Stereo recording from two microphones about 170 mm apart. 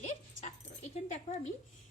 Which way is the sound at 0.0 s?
40° left (ahead or behind).